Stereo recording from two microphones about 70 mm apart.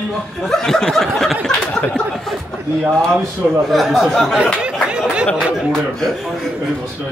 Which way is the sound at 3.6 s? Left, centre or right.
Centre.